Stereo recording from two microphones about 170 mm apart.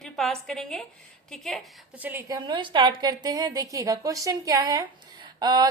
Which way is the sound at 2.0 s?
10° right (ahead or behind).